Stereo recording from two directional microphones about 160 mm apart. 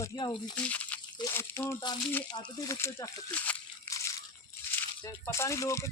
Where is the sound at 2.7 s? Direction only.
15° left (ahead or behind).